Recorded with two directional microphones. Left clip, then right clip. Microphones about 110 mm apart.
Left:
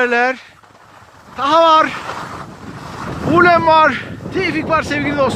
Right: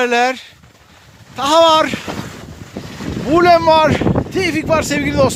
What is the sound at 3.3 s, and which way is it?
Speech, 40° right (ahead or behind).